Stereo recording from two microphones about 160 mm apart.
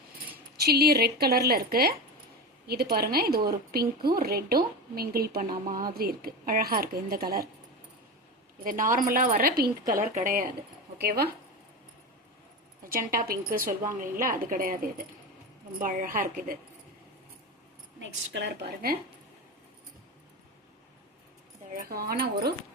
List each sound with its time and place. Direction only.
0.5 s a woman's voice: 80° right
8.6 s a woman's voice: 55° right (ahead or behind)
10.9 s speech: 80° right
12.9 s a woman's voice: 60° right (ahead or behind)
18.3 s speech: 85° right
21.7 s a woman's voice: 65° right (ahead or behind)